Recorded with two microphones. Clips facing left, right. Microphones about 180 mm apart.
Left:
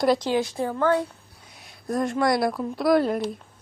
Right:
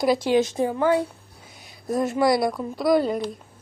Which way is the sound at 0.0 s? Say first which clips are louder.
Even; centre (ahead or behind).